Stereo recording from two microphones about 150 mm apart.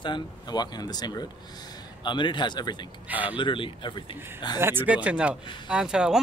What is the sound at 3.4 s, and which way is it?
Speech, 35° left (ahead or behind).